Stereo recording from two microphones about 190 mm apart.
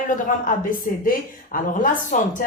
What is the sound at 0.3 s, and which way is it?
A woman's voice, 45° left (ahead or behind).